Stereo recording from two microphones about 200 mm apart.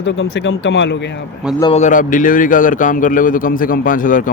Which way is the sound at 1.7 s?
40° left (ahead or behind).